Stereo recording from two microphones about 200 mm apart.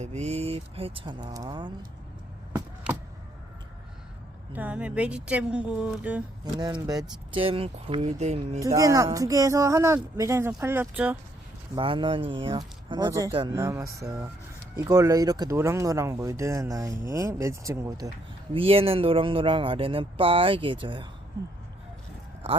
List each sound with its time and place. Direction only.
0.0 s speech: 35° right (ahead or behind)
4.5 s speech: 5° right (ahead or behind)
6.4 s speech: 20° right (ahead or behind)
8.5 s speech: 15° right (ahead or behind)
11.7 s speech: 25° right (ahead or behind)
18.5 s speech: 30° right (ahead or behind)